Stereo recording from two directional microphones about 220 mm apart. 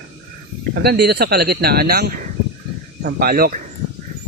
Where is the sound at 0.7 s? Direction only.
45° right (ahead or behind).